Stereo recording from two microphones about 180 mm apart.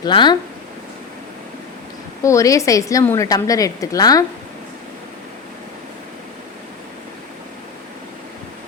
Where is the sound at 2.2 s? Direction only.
15° left (ahead or behind).